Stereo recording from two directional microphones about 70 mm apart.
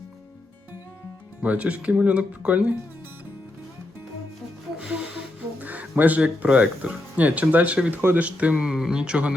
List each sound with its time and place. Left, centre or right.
1.4 s speech: centre
4.8 s music: centre
5.5 s speech: right